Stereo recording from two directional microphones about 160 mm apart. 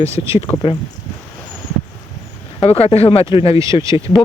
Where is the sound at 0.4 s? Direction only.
30° left (ahead or behind).